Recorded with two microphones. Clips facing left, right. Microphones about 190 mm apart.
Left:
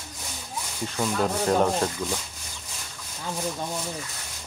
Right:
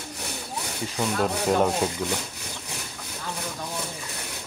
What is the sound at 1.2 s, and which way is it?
Rub, 5° right (ahead or behind).